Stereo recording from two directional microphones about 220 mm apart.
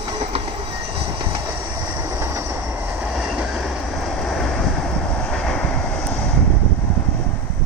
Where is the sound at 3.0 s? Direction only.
5° right (ahead or behind).